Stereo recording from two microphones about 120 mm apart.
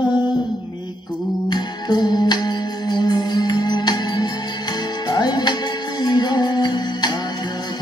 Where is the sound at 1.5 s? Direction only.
35° left (ahead or behind).